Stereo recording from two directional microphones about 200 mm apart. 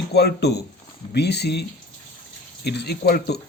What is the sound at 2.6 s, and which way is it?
Speech, 55° left (ahead or behind).